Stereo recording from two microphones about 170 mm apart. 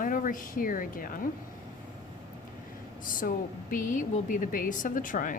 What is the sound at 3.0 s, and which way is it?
Speech, 55° left (ahead or behind).